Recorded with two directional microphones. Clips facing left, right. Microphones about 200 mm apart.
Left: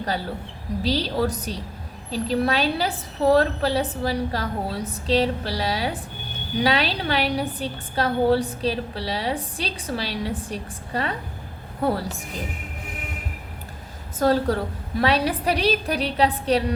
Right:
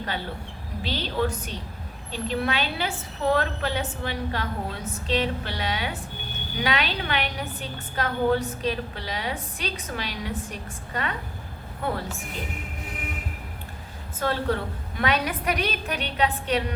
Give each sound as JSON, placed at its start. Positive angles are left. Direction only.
{"t": 0.8, "sound": "a woman's voice", "side_deg": 35}
{"t": 14.2, "sound": "a woman's voice", "side_deg": 40}